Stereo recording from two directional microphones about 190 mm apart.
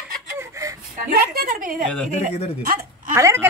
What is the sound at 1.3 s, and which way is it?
A woman's voice, 50° right (ahead or behind).